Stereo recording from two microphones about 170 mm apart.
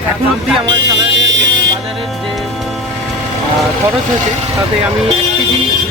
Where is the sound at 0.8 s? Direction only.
90° right.